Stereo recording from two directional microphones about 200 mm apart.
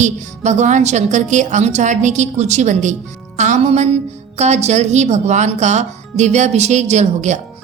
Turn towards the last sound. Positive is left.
turn(degrees=-35)  # may be behind; listen again after turning